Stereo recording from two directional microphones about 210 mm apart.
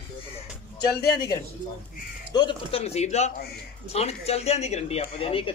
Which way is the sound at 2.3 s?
25° left (ahead or behind).